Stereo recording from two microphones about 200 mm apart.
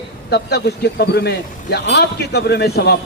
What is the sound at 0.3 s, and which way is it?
A man's voice, 55° left (ahead or behind).